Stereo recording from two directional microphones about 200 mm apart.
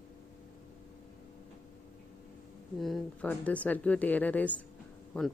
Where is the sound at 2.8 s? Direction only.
5° left (ahead or behind).